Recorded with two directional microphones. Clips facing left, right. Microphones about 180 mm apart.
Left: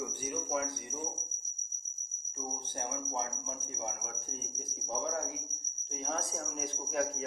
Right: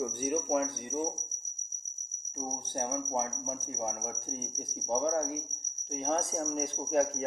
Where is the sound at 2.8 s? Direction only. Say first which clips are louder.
Right 5 dB; 45° right (ahead or behind).